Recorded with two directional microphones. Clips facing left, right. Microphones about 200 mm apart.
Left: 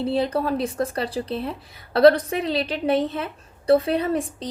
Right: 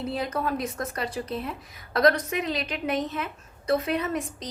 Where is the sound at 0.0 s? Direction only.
30° left (ahead or behind).